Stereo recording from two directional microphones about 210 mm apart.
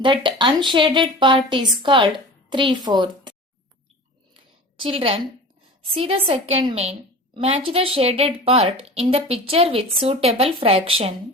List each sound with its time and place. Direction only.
0.0 s a woman's voice: 25° right (ahead or behind)
4.4 s a sound: 25° right (ahead or behind)
5.8 s a woman's voice: 25° right (ahead or behind)